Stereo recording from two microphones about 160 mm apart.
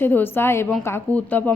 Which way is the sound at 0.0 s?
15° left (ahead or behind).